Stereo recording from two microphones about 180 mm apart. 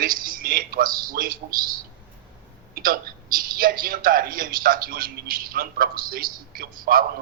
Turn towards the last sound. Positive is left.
turn(degrees=-55)  # may be behind; listen again after turning